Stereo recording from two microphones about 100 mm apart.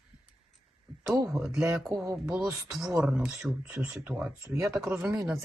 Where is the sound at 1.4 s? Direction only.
5° right (ahead or behind).